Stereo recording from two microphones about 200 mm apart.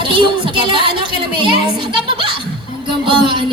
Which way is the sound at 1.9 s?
25° right (ahead or behind).